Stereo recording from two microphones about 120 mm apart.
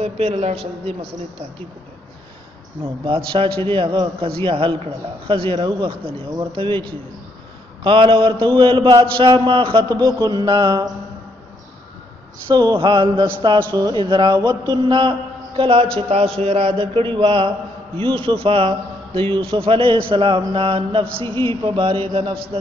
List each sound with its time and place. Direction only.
0.0 s a woman's voice: 60° right (ahead or behind)
3.1 s speech: 45° right (ahead or behind)
7.8 s speech: 45° right (ahead or behind)
9.8 s a man's voice: 35° right (ahead or behind)
12.4 s a man's voice: 40° right (ahead or behind)